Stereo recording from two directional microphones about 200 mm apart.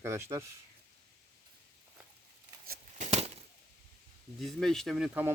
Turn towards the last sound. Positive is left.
turn(degrees=-10)  # may be behind; listen again after turning